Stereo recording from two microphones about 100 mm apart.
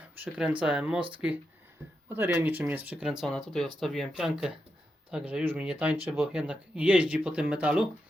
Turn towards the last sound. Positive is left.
turn(degrees=-10)  # may be behind; listen again after turning